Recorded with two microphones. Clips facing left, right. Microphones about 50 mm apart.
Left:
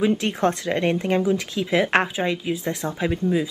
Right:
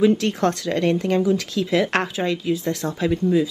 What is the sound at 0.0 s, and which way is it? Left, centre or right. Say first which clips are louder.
Speech: right 3 dB; centre.